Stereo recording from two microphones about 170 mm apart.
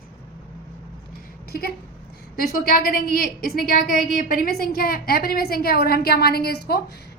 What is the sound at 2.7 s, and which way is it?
A woman's voice, 55° left (ahead or behind).